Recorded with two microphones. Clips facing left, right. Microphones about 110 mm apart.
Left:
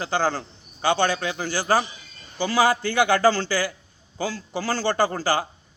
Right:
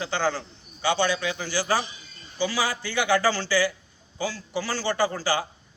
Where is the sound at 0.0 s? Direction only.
45° left (ahead or behind).